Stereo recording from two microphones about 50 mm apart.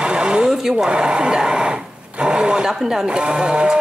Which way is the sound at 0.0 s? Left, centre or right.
Centre.